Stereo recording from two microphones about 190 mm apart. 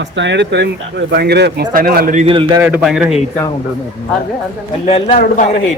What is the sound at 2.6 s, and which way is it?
Speech, 5° right (ahead or behind).